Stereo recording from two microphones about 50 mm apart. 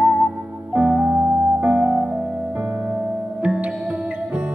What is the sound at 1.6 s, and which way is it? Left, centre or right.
Music, centre.